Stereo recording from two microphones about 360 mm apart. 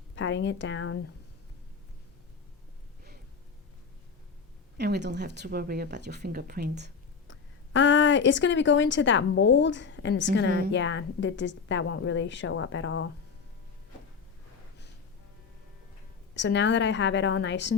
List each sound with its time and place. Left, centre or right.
0.2 s speech: left
4.8 s a woman's voice: right
7.3 s speech: left
16.3 s a woman's voice: left